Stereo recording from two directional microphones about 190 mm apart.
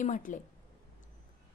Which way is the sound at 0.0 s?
40° left (ahead or behind).